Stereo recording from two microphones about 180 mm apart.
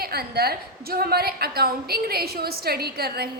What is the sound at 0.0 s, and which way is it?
A woman's voice, 60° right (ahead or behind).